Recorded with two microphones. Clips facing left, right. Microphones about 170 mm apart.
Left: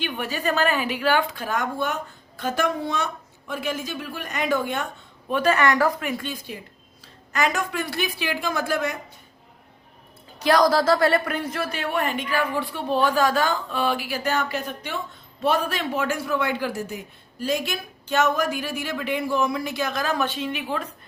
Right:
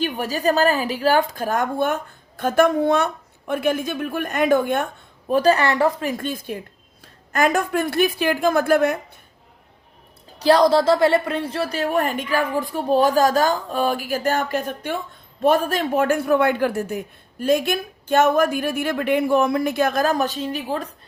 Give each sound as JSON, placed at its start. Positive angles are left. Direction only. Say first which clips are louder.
{"t": 0.0, "sound": "a woman's voice", "louder": "right 5 dB", "side_deg": -40}
{"t": 5.3, "sound": "a woman's voice", "louder": "right 3 dB", "side_deg": -35}
{"t": 6.1, "sound": "a woman's voice", "louder": "right 5 dB", "side_deg": -50}
{"t": 10.4, "sound": "a woman's voice", "louder": "right 4 dB", "side_deg": -30}